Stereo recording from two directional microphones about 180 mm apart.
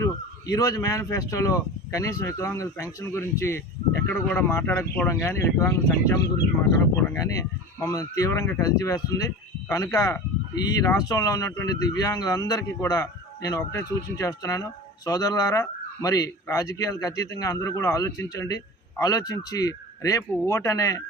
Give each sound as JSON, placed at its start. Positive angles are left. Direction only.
{"t": 0.0, "sound": "a man's voice", "side_deg": 20}